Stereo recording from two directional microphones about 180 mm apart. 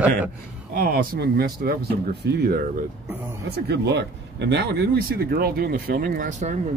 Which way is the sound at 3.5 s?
70° right (ahead or behind).